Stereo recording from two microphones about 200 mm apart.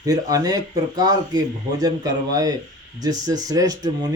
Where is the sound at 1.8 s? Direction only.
20° right (ahead or behind).